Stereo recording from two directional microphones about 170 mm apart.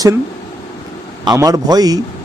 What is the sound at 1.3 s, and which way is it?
Speech, 20° right (ahead or behind).